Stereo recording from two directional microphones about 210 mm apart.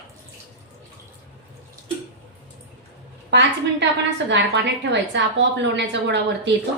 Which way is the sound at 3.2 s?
55° right (ahead or behind).